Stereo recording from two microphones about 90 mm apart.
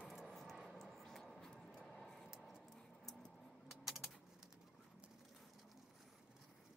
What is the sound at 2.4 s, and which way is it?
Typing, centre (ahead or behind).